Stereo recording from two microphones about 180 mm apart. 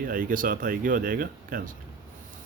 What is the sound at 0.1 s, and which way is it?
A man's voice, 50° right (ahead or behind).